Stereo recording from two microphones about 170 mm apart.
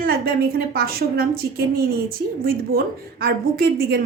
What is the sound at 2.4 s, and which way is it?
A woman's voice, 60° right (ahead or behind).